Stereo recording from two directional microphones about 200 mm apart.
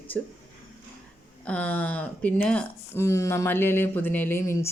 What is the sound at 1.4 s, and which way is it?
Speech, 5° left (ahead or behind).